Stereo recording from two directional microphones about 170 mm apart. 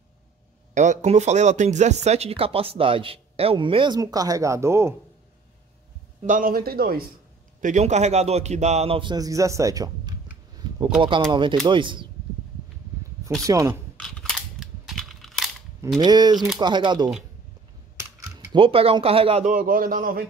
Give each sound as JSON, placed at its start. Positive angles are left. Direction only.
{"t": 0.7, "sound": "speech", "side_deg": -45}
{"t": 6.2, "sound": "a man's voice", "side_deg": -50}
{"t": 7.6, "sound": "speech", "side_deg": -45}
{"t": 11.0, "sound": "speech", "side_deg": -30}
{"t": 13.5, "sound": "speech", "side_deg": -20}
{"t": 13.9, "sound": "cap gun", "side_deg": 0}
{"t": 16.0, "sound": "speech", "side_deg": -25}
{"t": 17.9, "sound": "typing", "side_deg": -20}
{"t": 18.6, "sound": "speech", "side_deg": -35}